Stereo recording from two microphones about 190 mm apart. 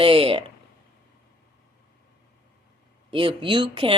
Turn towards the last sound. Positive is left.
turn(degrees=-25)  # may be behind; listen again after turning